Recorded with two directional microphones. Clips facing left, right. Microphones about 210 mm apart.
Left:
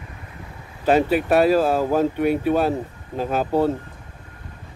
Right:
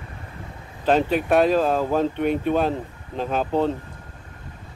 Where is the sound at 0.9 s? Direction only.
10° left (ahead or behind).